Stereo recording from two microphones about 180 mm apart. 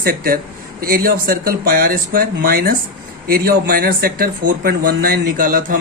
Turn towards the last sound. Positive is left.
turn(degrees=-50)  # may be behind; listen again after turning